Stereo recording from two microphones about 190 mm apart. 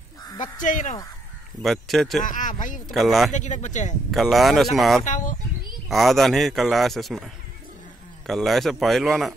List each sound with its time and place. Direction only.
0.4 s speech: 45° left (ahead or behind)
1.6 s speech: centre (ahead or behind)
2.2 s speech: 40° left (ahead or behind)
2.9 s speech: centre (ahead or behind)
3.3 s speech: 40° left (ahead or behind)
4.1 s speech: centre (ahead or behind)
5.0 s speech: 40° left (ahead or behind)
5.9 s speech: centre (ahead or behind)
8.3 s speech: centre (ahead or behind)